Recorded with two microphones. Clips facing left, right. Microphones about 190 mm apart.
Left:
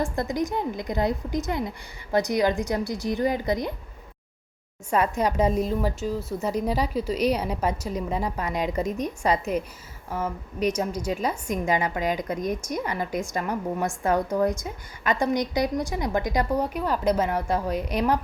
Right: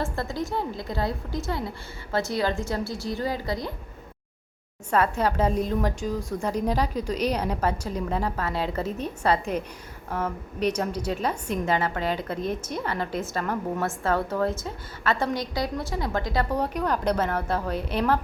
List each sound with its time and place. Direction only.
0.0 s a woman's voice: 15° left (ahead or behind)
4.9 s a woman's voice: 10° left (ahead or behind)